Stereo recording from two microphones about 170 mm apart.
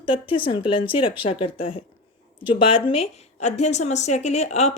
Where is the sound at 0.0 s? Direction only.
30° left (ahead or behind).